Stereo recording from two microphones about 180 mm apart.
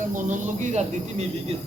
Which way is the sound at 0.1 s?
45° right (ahead or behind).